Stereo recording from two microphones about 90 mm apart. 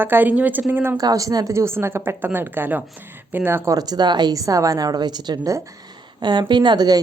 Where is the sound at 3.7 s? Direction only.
45° right (ahead or behind).